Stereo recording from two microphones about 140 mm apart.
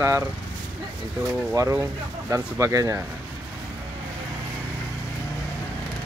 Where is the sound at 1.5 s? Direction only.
20° right (ahead or behind).